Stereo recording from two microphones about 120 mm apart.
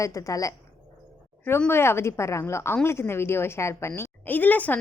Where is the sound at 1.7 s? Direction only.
20° left (ahead or behind).